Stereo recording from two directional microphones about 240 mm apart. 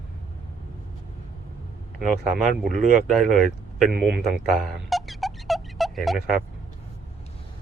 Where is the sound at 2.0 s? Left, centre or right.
Centre.